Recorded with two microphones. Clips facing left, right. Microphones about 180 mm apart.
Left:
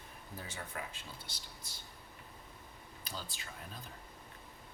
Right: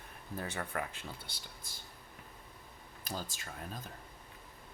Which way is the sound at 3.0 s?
45° right (ahead or behind).